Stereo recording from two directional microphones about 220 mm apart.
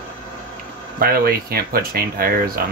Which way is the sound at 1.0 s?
45° right (ahead or behind).